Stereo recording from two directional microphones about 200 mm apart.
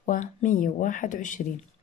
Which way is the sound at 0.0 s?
40° left (ahead or behind).